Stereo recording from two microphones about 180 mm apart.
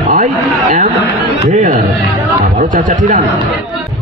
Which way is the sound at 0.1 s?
45° right (ahead or behind).